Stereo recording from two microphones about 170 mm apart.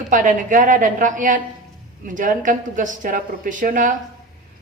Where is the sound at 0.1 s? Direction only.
50° right (ahead or behind).